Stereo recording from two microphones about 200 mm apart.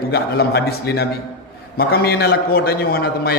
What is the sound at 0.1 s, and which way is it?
A man's voice, 50° left (ahead or behind).